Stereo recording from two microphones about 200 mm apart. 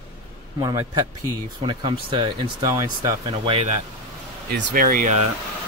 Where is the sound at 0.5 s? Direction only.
15° right (ahead or behind).